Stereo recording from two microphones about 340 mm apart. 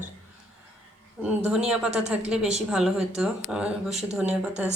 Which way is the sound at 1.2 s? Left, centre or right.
Centre.